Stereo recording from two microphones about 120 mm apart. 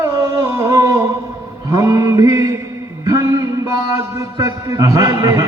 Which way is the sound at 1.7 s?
30° right (ahead or behind).